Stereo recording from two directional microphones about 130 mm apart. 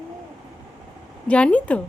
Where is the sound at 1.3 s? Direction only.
10° left (ahead or behind).